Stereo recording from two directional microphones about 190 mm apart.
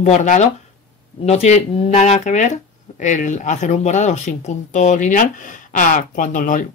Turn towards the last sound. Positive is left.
turn(degrees=45)  # may be behind; listen again after turning